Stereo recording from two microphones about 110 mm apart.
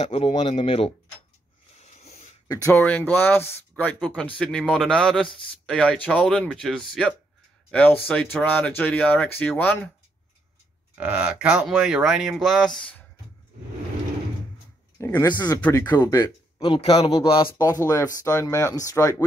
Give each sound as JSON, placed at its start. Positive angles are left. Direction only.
{"t": 0.0, "sound": "speech", "side_deg": 80}
{"t": 1.8, "sound": "a sound", "side_deg": 90}
{"t": 2.4, "sound": "speech", "side_deg": 30}
{"t": 2.7, "sound": "speech", "side_deg": 15}
{"t": 11.0, "sound": "speech", "side_deg": -10}
{"t": 15.0, "sound": "speech", "side_deg": 20}
{"t": 15.2, "sound": "speech", "side_deg": 40}
{"t": 16.6, "sound": "a man's voice", "side_deg": 55}
{"t": 17.6, "sound": "speech", "side_deg": 30}